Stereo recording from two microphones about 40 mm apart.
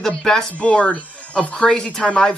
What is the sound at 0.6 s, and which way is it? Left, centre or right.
Speech, left.